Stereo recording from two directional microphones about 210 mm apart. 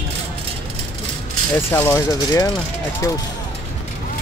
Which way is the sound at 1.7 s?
15° left (ahead or behind).